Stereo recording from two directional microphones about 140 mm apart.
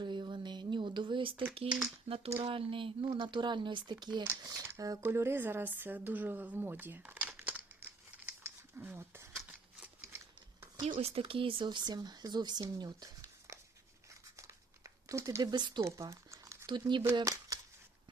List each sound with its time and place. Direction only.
0.0 s a sound: 35° right (ahead or behind)
2.0 s speech: 40° right (ahead or behind); by 7.9 s 10° right (ahead or behind)
8.3 s scissors: 15° right (ahead or behind)
10.9 s speech: 40° right (ahead or behind)
14.3 s crumpling: 20° right (ahead or behind)
15.8 s crumpling: 20° right (ahead or behind)
16.6 s speech: 35° right (ahead or behind)
17.2 s a sound: 25° right (ahead or behind)